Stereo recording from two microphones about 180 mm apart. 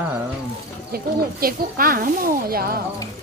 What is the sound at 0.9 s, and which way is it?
Speech, 55° right (ahead or behind).